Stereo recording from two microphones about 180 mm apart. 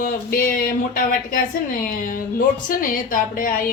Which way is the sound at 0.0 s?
50° left (ahead or behind).